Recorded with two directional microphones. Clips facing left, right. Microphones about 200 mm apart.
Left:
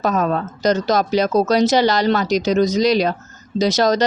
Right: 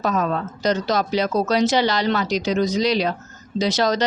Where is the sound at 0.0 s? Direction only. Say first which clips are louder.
Left 3 dB; 45° left (ahead or behind).